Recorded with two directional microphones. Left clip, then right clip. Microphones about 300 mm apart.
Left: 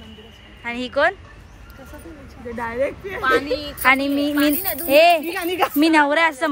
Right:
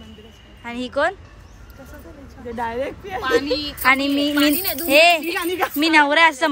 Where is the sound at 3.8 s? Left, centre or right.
Centre.